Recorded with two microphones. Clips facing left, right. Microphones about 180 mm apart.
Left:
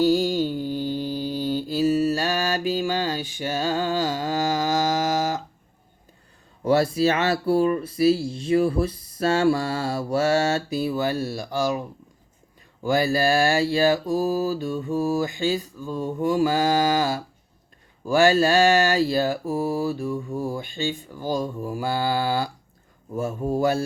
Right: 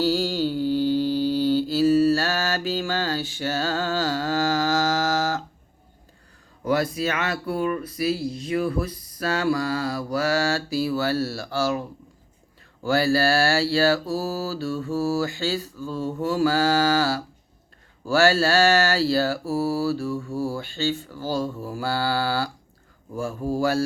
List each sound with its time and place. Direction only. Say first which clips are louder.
0.0 s music: left 3 dB; 15° left (ahead or behind)
0.8 s mantra: right 5 dB; 15° left (ahead or behind)
6.7 s speech: left 4 dB; 30° left (ahead or behind)
12.8 s mantra: even; 15° left (ahead or behind)
23.1 s speech: left 1 dB; 20° left (ahead or behind)